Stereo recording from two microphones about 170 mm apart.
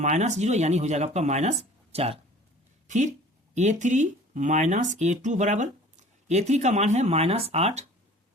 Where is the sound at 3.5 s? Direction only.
45° right (ahead or behind).